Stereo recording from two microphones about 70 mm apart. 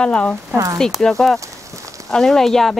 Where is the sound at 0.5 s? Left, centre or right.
Right.